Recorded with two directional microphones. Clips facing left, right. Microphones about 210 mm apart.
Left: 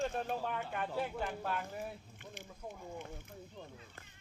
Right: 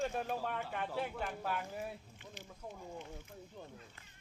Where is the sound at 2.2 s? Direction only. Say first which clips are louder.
Left 2 dB; 55° left (ahead or behind).